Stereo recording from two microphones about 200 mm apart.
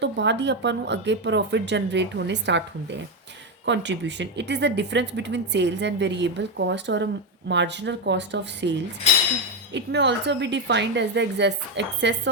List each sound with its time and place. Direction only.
0.0 s speech: 60° right (ahead or behind)
3.7 s speech: 60° right (ahead or behind)